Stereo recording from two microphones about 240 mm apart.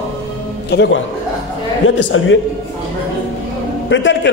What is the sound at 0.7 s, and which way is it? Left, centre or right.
A man's voice, left.